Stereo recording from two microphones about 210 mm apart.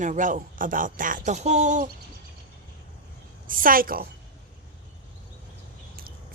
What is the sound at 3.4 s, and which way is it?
Speech, 40° right (ahead or behind).